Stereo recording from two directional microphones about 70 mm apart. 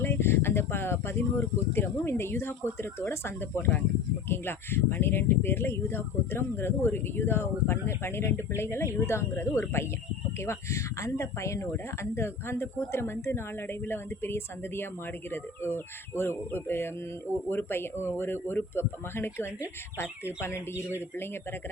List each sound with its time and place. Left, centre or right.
0.0 s speech: left